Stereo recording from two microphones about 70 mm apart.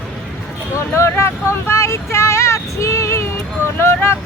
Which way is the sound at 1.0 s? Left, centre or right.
Left.